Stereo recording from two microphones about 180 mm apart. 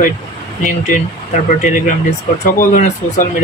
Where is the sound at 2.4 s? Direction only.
50° left (ahead or behind).